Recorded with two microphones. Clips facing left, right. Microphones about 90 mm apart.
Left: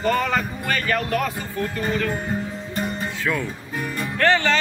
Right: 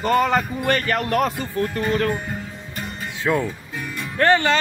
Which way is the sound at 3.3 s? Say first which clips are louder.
Right 6 dB; 25° right (ahead or behind).